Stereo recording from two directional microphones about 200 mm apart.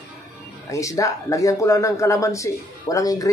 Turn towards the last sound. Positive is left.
turn(degrees=15)  # may be behind; listen again after turning